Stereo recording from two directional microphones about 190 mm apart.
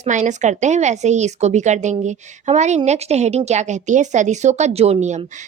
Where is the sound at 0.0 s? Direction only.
40° right (ahead or behind).